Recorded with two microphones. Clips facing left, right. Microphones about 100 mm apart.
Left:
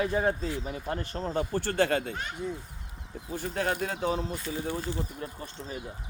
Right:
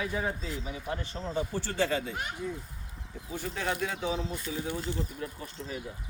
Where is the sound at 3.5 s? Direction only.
45° left (ahead or behind).